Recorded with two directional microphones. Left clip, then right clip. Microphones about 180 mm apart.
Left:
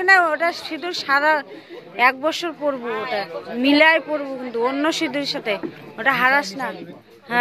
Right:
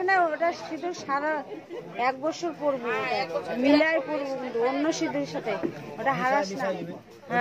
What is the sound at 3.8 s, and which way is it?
Speech, 35° left (ahead or behind).